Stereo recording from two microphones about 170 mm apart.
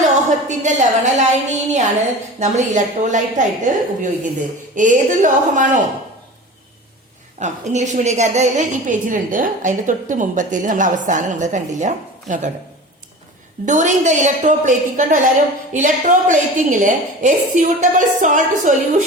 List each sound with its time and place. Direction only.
0.0 s a woman's voice: 45° right (ahead or behind)
7.3 s a woman's voice: 45° right (ahead or behind)
13.7 s a woman's voice: 45° right (ahead or behind)